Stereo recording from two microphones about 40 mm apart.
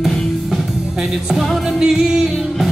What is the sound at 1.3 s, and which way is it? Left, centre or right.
Music, centre.